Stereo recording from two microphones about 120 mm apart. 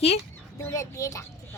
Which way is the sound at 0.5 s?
25° left (ahead or behind).